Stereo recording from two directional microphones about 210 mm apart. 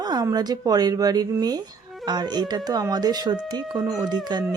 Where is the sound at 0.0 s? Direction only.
20° right (ahead or behind).